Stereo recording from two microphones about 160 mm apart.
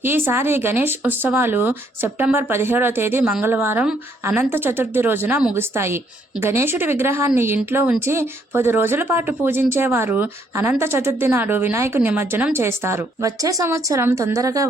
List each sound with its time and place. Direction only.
0.0 s speech: 15° right (ahead or behind)